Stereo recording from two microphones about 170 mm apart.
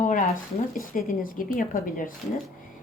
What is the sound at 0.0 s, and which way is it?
Speech, 50° left (ahead or behind).